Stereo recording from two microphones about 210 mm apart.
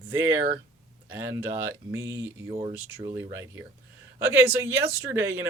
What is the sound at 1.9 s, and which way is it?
Speech, 15° right (ahead or behind).